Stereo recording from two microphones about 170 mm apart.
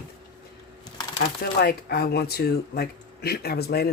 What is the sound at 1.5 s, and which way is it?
Speech, 70° left (ahead or behind).